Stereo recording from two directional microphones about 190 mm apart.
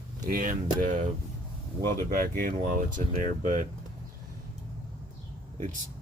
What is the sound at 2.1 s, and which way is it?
Speech, 50° right (ahead or behind).